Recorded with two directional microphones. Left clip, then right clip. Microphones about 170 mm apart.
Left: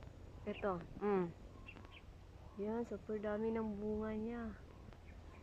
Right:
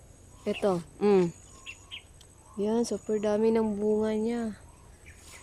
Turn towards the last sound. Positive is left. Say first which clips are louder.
# right 15 dB
turn(degrees=-30)  # may be behind; listen again after turning